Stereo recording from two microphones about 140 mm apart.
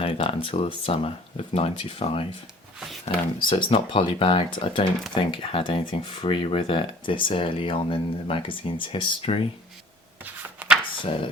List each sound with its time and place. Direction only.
0.0 s speech: 40° left (ahead or behind)